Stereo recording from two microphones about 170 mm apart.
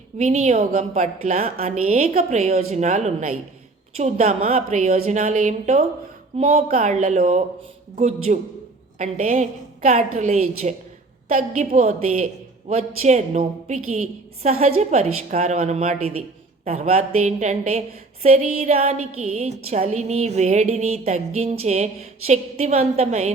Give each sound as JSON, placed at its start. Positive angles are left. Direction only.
{"t": 0.2, "sound": "a woman's voice", "side_deg": -40}
{"t": 0.5, "sound": "a woman's voice", "side_deg": -55}
{"t": 6.7, "sound": "a woman's voice", "side_deg": -50}